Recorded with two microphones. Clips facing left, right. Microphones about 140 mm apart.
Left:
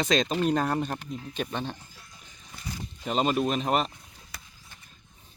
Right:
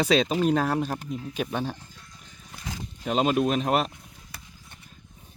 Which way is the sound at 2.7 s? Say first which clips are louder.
Right 1 dB; 90° right.